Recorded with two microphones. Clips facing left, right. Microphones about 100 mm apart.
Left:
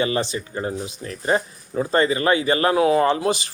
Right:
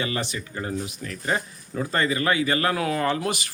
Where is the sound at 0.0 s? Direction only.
30° left (ahead or behind).